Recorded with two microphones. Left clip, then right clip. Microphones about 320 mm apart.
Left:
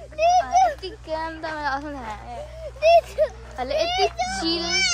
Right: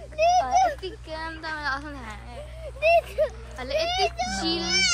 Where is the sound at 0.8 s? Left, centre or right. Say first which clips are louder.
Left 5 dB; left.